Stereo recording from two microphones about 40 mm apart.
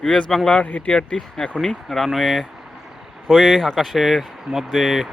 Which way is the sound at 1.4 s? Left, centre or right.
Centre.